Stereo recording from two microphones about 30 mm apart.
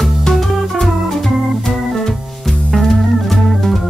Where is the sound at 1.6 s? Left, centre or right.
Centre.